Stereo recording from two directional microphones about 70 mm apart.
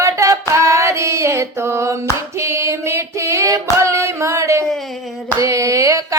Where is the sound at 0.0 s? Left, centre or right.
Right.